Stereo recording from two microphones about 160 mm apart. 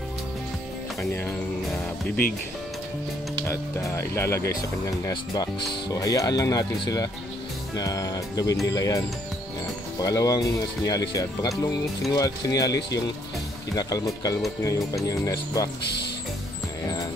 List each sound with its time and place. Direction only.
3.4 s speech: 15° left (ahead or behind)
16.8 s music: 20° left (ahead or behind)